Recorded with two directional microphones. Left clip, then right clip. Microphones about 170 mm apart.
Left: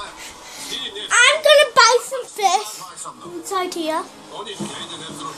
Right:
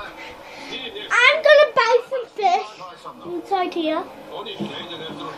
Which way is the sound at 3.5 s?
50° left (ahead or behind).